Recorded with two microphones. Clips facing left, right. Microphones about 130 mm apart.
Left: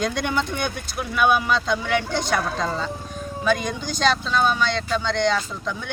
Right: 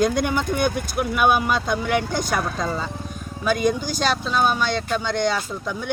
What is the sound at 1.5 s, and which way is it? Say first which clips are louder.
Speech: even; 10° right (ahead or behind).